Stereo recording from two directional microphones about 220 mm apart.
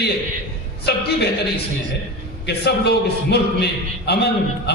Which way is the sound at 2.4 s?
50° left (ahead or behind).